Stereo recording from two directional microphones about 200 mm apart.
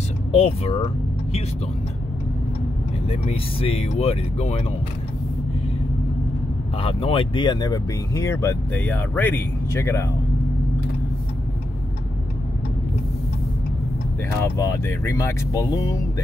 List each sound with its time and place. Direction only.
0.3 s speech: 30° left (ahead or behind)
3.1 s speech: 30° left (ahead or behind)
6.8 s speech: 30° left (ahead or behind)
14.4 s speech: 15° left (ahead or behind)